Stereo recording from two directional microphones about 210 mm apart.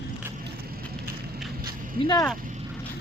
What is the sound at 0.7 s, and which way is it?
Vehicle, 45° right (ahead or behind).